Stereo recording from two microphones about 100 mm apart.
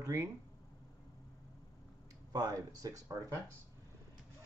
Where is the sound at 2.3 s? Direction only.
40° right (ahead or behind).